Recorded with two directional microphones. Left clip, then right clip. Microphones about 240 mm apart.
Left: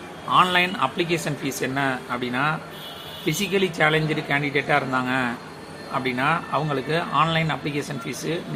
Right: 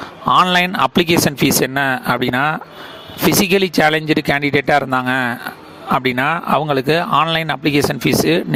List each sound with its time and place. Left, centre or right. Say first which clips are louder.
0.3 s speech: right 6 dB; right